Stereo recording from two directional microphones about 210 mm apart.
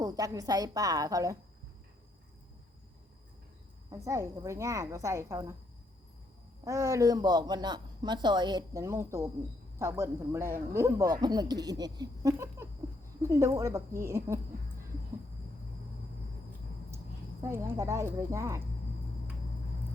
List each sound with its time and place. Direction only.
0.0 s a woman's voice: 15° right (ahead or behind)
3.9 s a woman's voice: 15° right (ahead or behind)
6.7 s a woman's voice: 15° right (ahead or behind)
17.4 s a woman's voice: 10° right (ahead or behind)